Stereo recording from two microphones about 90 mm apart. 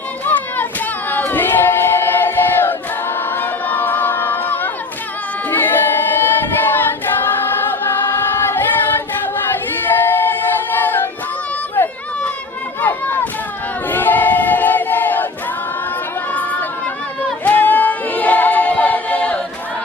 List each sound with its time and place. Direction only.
0.3 s a sound: 20° left (ahead or behind)
1.1 s choir: 20° left (ahead or behind)
3.3 s crowd: 20° left (ahead or behind)
5.5 s singing: 20° left (ahead or behind)
10.1 s a sound: 20° left (ahead or behind)
11.8 s run: 20° left (ahead or behind)
13.9 s choir: 20° left (ahead or behind)
16.3 s chatter: 15° left (ahead or behind)
17.4 s choir: 20° left (ahead or behind)